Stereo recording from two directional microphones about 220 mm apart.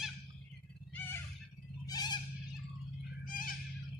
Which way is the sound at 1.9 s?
15° left (ahead or behind).